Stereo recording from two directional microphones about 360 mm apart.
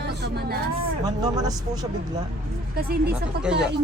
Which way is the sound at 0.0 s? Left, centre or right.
Right.